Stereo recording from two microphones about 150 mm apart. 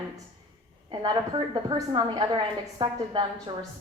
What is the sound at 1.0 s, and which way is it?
A woman's voice, 30° right (ahead or behind).